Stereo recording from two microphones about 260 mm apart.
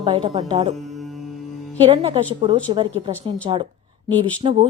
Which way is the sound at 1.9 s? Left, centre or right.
Right.